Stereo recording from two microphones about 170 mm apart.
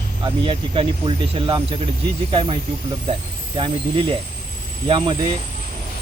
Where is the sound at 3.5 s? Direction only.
30° right (ahead or behind).